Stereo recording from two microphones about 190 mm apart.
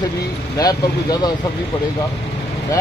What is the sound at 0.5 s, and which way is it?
Speech, 20° left (ahead or behind).